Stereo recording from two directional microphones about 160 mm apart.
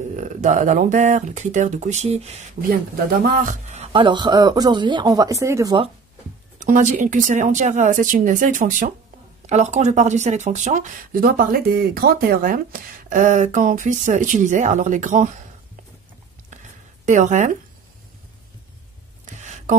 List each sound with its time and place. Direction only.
0.1 s speech: 50° right (ahead or behind)
2.7 s speech: 65° right (ahead or behind)
3.6 s speech: 45° right (ahead or behind); by 5.8 s 20° right (ahead or behind)
6.6 s speech: 50° right (ahead or behind)
17.0 s speech: 50° right (ahead or behind)
19.3 s a sound: 50° right (ahead or behind)